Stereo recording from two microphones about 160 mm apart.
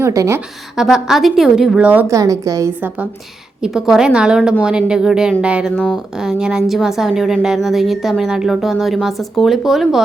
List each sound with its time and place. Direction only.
0.0 s a woman's voice: 20° right (ahead or behind)
0.8 s a woman's voice: 5° right (ahead or behind)
2.1 s a woman's voice: 20° right (ahead or behind)
5.7 s speech: 5° left (ahead or behind)
6.1 s a woman's voice: 5° right (ahead or behind)